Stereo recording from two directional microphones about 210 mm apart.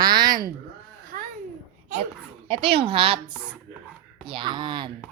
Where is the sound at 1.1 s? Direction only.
40° right (ahead or behind).